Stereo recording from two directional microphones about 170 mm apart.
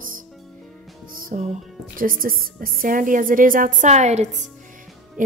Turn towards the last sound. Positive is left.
turn(degrees=-40)  # may be behind; listen again after turning